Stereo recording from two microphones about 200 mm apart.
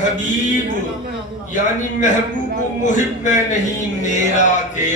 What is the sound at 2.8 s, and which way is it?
A man's voice, 40° left (ahead or behind).